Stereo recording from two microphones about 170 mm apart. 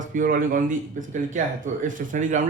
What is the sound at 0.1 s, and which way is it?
A man's voice, 55° right (ahead or behind).